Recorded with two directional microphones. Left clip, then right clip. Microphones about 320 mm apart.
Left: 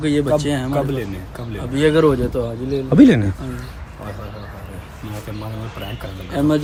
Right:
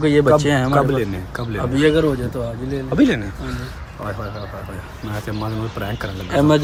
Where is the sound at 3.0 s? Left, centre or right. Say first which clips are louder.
Left 5 dB; centre.